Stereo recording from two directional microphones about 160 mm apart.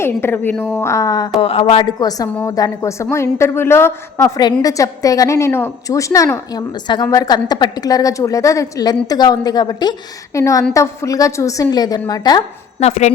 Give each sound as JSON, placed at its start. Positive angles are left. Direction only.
{"t": 0.0, "sound": "a woman's voice", "side_deg": 15}
{"t": 1.4, "sound": "a woman's voice", "side_deg": 35}
{"t": 12.8, "sound": "speech", "side_deg": 45}